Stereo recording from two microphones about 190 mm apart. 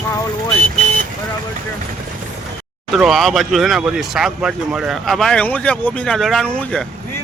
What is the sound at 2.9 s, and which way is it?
Speech, centre (ahead or behind).